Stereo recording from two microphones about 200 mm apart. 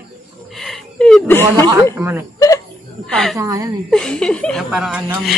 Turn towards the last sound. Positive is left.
turn(degrees=-5)  # may be behind; listen again after turning